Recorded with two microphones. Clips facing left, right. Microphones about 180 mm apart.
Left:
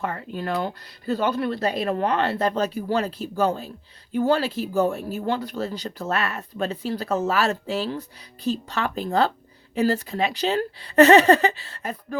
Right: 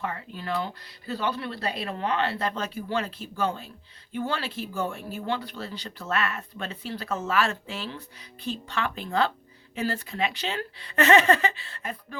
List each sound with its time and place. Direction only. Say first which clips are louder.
0.0 s speech: left 5 dB; 45° left (ahead or behind)